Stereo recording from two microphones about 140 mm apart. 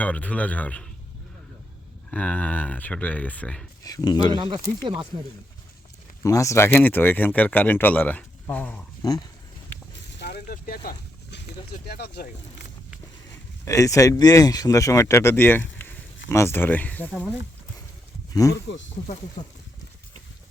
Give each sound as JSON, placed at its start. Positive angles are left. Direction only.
{"t": 0.0, "sound": "speech", "side_deg": 10}
{"t": 2.0, "sound": "speech", "side_deg": 10}
{"t": 3.8, "sound": "speech", "side_deg": 30}
{"t": 4.4, "sound": "speech", "side_deg": -30}
{"t": 6.2, "sound": "speech", "side_deg": 20}
{"t": 9.0, "sound": "speech", "side_deg": 25}
{"t": 10.4, "sound": "speech", "side_deg": 85}
{"t": 13.7, "sound": "speech", "side_deg": 25}